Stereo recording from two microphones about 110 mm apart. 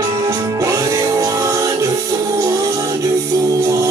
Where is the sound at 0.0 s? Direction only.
30° right (ahead or behind).